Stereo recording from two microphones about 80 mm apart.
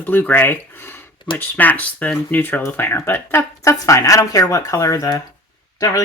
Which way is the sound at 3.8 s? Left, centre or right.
Left.